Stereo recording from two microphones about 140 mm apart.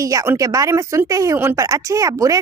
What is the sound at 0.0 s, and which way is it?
Speech, 25° right (ahead or behind).